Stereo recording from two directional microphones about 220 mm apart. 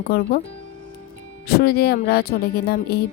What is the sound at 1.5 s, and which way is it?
A woman's voice, 45° left (ahead or behind).